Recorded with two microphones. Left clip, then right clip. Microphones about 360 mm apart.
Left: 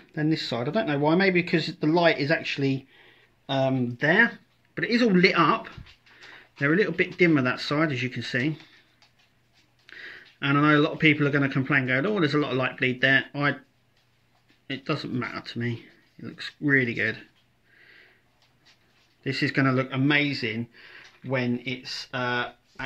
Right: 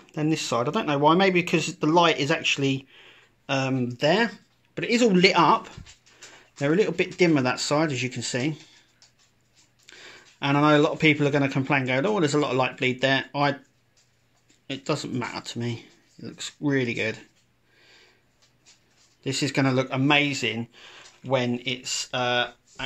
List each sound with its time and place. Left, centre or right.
0.3 s speech: centre
9.8 s speech: centre
14.7 s speech: centre
19.2 s speech: centre